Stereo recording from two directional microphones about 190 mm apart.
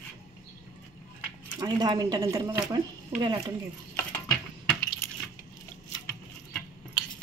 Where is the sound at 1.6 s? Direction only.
20° right (ahead or behind).